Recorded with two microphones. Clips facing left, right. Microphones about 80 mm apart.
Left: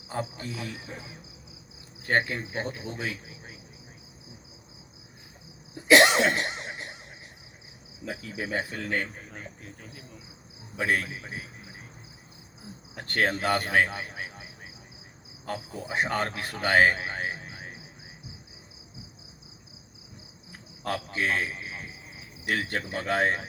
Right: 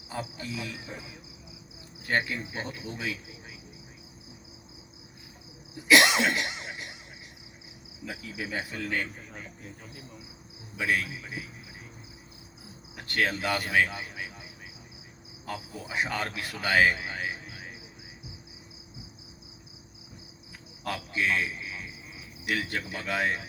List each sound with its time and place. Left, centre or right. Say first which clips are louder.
0.1 s speech: left 2 dB; left
2.0 s speech: left 3 dB; left
5.9 s cough: left 3 dB; left
8.0 s speech: left 3 dB; left
10.8 s speech: left 1 dB; left
13.0 s speech: left 2 dB; left
15.5 s a man's voice: left 2 dB; left
20.5 s cricket: left 3 dB; left